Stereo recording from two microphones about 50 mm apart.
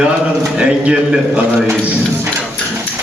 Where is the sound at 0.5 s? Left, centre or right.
Centre.